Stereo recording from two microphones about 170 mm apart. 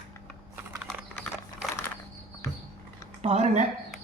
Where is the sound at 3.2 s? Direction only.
40° right (ahead or behind).